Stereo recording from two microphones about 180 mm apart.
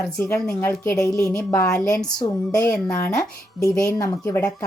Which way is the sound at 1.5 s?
20° left (ahead or behind).